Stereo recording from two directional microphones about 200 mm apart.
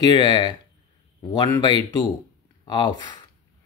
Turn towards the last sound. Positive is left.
turn(degrees=20)  # may be behind; listen again after turning